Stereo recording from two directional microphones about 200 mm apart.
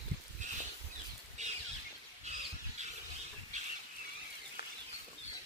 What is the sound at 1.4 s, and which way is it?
Bird flight, 35° right (ahead or behind).